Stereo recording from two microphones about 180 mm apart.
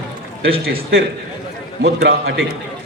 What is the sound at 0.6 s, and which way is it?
A woman's voice, 75° right (ahead or behind).